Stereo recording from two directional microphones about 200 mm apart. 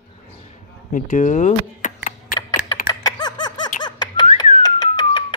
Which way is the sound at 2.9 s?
20° left (ahead or behind).